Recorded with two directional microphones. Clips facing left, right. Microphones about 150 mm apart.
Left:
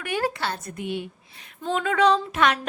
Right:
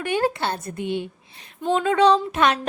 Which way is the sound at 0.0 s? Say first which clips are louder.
Right 4 dB; 25° right (ahead or behind).